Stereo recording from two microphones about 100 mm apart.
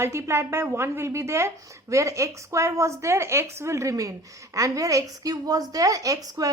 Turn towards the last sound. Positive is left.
turn(degrees=-35)  # may be behind; listen again after turning